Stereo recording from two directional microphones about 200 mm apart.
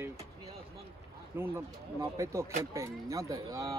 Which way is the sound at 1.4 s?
10° right (ahead or behind).